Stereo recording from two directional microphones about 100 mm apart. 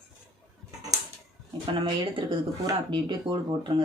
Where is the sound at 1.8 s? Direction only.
60° right (ahead or behind).